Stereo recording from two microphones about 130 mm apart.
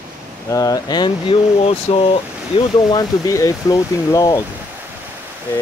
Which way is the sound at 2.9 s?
25° left (ahead or behind).